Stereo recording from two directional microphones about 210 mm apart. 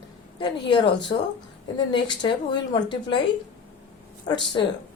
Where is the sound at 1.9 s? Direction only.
20° left (ahead or behind).